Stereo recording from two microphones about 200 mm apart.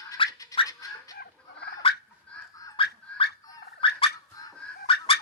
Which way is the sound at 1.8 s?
30° left (ahead or behind).